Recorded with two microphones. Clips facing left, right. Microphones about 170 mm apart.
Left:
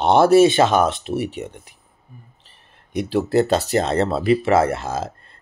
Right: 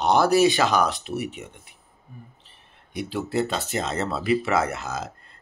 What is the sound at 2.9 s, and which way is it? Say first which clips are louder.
Speech: left 8 dB; 40° left (ahead or behind).